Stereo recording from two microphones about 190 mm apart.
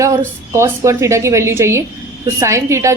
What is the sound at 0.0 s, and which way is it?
Speech, 15° right (ahead or behind).